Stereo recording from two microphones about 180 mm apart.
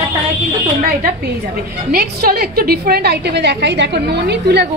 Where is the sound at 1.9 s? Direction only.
60° right (ahead or behind).